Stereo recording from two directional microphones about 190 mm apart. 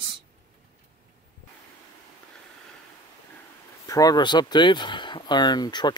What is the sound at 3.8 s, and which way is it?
Speech, 20° left (ahead or behind).